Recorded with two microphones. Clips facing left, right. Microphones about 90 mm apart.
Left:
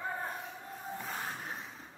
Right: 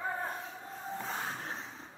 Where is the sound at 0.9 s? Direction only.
20° right (ahead or behind).